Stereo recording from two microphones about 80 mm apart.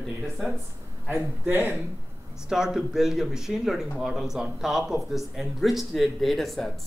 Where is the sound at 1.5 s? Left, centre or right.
Right.